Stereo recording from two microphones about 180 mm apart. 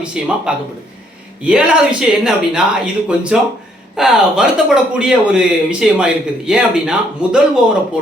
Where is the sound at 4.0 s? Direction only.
5° right (ahead or behind).